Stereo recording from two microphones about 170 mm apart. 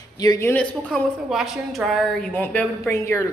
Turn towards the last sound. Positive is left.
turn(degrees=15)  # may be behind; listen again after turning